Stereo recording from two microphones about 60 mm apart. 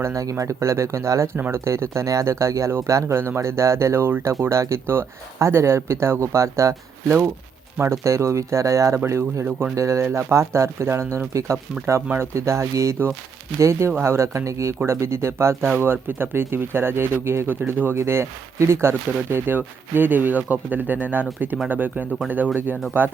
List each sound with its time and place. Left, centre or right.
0.0 s speech: right
1.4 s speech: right
1.6 s speech: right
3.2 s speech: right
9.0 s speech: right
9.7 s speech: right